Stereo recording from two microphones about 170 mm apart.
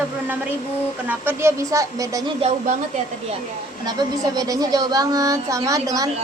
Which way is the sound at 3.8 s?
20° right (ahead or behind).